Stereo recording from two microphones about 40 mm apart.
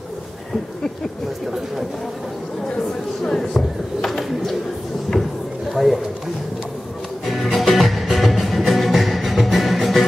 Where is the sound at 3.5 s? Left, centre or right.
Centre.